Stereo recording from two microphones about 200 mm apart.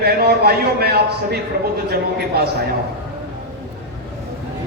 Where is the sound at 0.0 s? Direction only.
50° right (ahead or behind).